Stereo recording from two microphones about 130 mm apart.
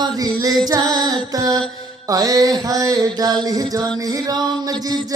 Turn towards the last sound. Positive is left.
turn(degrees=-30)  # may be behind; listen again after turning